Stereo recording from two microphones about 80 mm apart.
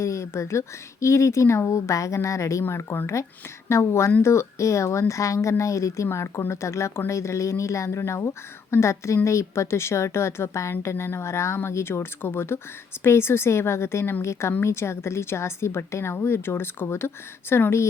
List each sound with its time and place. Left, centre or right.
0.0 s a woman's voice: left